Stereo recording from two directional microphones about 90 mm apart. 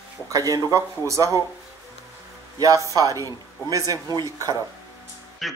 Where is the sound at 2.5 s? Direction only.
40° right (ahead or behind).